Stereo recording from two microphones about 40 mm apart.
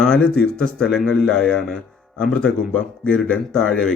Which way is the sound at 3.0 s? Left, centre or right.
Left.